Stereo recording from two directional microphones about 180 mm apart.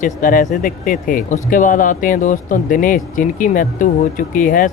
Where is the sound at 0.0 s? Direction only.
50° left (ahead or behind).